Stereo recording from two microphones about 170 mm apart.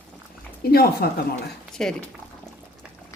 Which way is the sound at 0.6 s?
65° left (ahead or behind).